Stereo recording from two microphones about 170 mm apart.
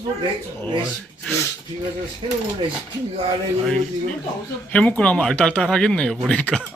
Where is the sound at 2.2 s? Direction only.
35° right (ahead or behind).